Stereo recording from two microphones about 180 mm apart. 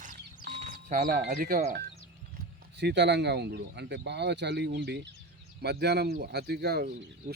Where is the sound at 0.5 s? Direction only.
40° right (ahead or behind).